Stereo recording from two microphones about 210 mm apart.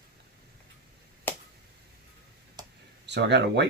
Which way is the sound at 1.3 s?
10° left (ahead or behind).